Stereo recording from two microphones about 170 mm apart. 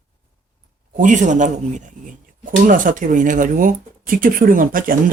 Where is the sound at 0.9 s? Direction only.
45° right (ahead or behind).